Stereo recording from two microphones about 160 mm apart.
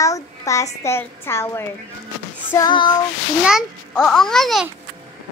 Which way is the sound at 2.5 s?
25° left (ahead or behind).